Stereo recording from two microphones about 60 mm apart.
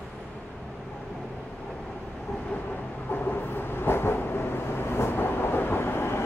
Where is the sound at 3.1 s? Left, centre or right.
Left.